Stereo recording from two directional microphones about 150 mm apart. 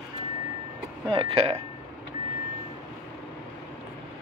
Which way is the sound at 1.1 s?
40° right (ahead or behind).